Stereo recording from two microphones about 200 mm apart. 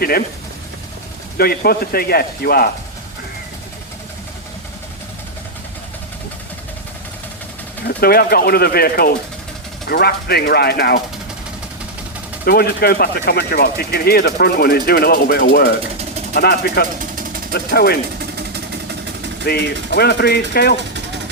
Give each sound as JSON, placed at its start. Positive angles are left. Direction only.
{"t": 1.4, "sound": "speech", "side_deg": 50}
{"t": 7.9, "sound": "speech", "side_deg": 50}
{"t": 12.5, "sound": "speech", "side_deg": 50}
{"t": 19.5, "sound": "speech", "side_deg": 55}